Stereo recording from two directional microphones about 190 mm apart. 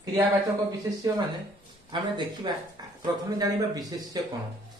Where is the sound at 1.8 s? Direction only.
25° right (ahead or behind).